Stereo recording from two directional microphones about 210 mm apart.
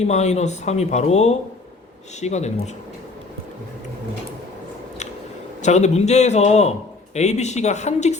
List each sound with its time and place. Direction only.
0.1 s a man's voice: 35° left (ahead or behind)
5.6 s a man's voice: 35° left (ahead or behind)